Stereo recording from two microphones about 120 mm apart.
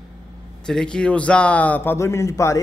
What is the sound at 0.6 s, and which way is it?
A man's voice, 5° left (ahead or behind).